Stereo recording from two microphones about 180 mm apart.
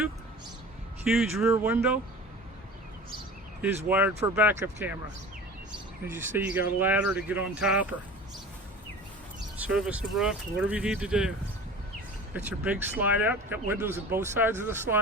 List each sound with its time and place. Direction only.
1.0 s speech: 5° right (ahead or behind)
3.8 s speech: 10° right (ahead or behind)
6.1 s speech: 10° right (ahead or behind)
9.6 s speech: 5° right (ahead or behind)
12.3 s speech: 10° right (ahead or behind)